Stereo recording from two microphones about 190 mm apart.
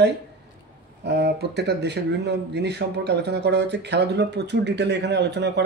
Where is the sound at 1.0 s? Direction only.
60° right (ahead or behind).